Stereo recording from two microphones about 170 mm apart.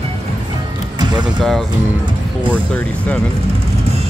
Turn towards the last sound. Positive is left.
turn(degrees=10)  # may be behind; listen again after turning